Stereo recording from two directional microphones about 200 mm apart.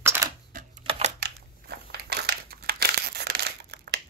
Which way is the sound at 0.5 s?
40° right (ahead or behind).